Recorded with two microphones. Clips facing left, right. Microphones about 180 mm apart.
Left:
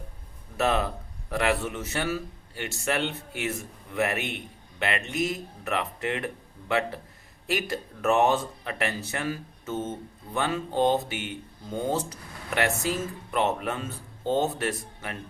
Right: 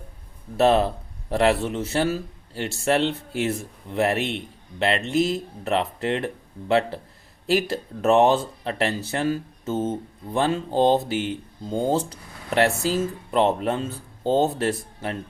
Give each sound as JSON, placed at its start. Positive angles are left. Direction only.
{"t": 0.5, "sound": "speech", "side_deg": -35}